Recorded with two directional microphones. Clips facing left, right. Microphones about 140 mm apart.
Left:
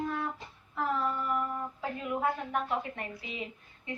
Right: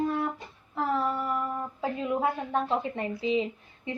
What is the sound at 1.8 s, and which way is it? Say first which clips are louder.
A woman's voice: right 4 dB; 25° right (ahead or behind).